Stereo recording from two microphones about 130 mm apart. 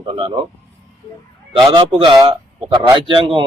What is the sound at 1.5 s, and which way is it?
A man's voice, 40° right (ahead or behind).